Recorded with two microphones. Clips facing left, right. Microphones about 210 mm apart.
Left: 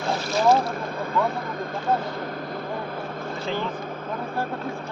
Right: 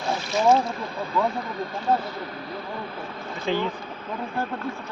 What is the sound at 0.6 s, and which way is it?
Speech, 55° left (ahead or behind).